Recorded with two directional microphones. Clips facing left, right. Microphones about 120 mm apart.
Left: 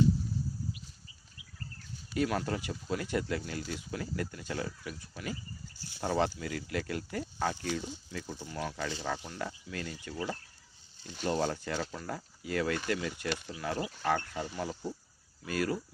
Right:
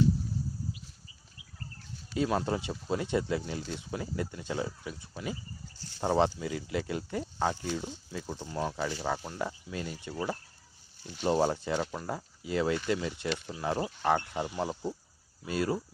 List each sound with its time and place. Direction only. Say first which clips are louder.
2.1 s speech: right 2 dB; 25° right (ahead or behind)
11.2 s speech: right 4 dB; 20° right (ahead or behind)